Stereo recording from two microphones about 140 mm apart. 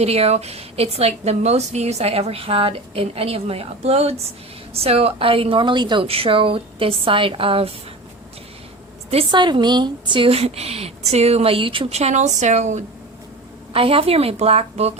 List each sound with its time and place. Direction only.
0.0 s a woman's voice: 50° right (ahead or behind)
9.3 s a woman's voice: 35° right (ahead or behind); by 12.8 s 55° right (ahead or behind)
13.7 s a woman's voice: 40° right (ahead or behind)